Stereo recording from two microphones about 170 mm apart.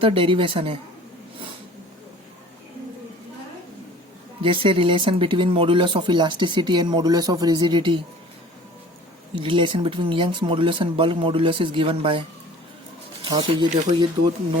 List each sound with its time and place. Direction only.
0.0 s speech: 30° right (ahead or behind)
4.4 s speech: 30° right (ahead or behind)
9.3 s speech: 30° right (ahead or behind)
13.2 s speech: 30° right (ahead or behind)